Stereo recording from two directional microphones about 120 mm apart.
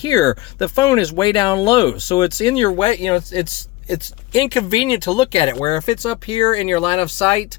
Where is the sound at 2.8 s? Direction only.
65° left (ahead or behind).